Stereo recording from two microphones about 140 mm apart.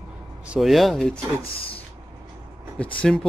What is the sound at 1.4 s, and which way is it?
Speech, 40° left (ahead or behind).